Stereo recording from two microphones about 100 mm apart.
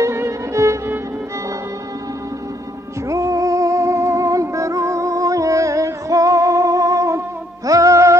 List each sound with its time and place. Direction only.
0.0 s music: 30° right (ahead or behind)
3.1 s music: 30° right (ahead or behind)